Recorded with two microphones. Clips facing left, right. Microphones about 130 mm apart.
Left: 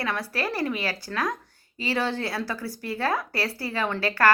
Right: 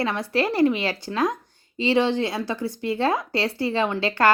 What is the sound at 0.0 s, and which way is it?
Speech, 25° right (ahead or behind).